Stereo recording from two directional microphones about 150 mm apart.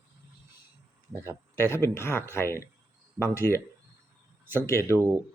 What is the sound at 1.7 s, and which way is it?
Speech, 15° left (ahead or behind).